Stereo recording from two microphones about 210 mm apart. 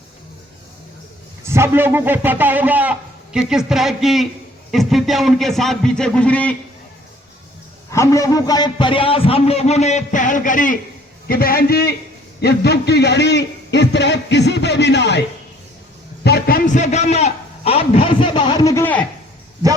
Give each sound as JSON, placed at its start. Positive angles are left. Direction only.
{"t": 1.5, "sound": "a man's voice", "side_deg": -10}
{"t": 7.9, "sound": "a man's voice", "side_deg": 15}
{"t": 16.2, "sound": "a man's voice", "side_deg": 50}